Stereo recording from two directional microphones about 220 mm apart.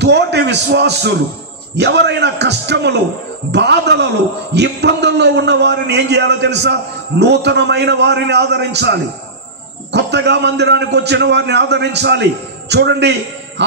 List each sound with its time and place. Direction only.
0.0 s a man's voice: 50° right (ahead or behind)